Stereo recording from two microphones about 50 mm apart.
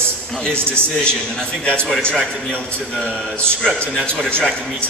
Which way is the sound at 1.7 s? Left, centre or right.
Centre.